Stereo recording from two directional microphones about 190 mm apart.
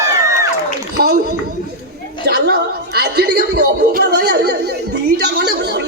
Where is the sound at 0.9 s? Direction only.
55° right (ahead or behind).